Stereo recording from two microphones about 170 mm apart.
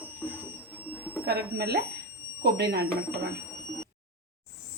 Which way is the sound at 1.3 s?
70° right (ahead or behind).